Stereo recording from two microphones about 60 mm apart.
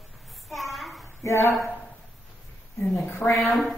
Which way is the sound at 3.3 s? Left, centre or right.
Centre.